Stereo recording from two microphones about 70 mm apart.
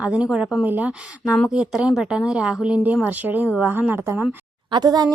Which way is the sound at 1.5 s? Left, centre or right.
Centre.